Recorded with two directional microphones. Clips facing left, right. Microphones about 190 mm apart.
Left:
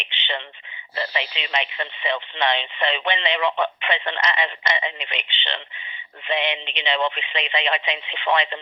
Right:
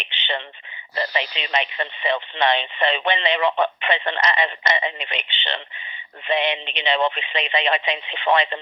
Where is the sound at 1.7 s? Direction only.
40° right (ahead or behind).